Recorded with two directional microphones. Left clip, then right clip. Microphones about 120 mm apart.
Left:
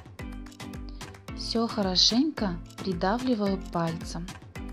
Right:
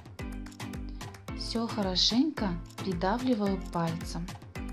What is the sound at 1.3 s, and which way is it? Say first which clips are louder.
Speech: left 5 dB; 35° left (ahead or behind).